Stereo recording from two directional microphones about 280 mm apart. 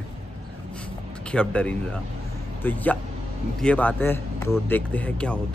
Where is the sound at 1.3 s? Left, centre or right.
Centre.